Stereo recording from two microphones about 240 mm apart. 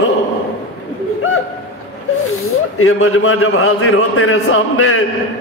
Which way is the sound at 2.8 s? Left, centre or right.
Left.